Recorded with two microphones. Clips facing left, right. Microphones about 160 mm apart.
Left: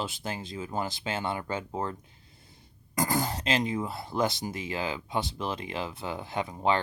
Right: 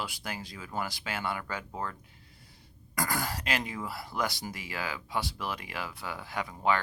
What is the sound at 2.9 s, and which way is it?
Speech, 20° left (ahead or behind).